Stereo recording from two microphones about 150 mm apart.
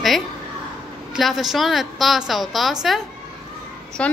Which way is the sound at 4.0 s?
10° left (ahead or behind).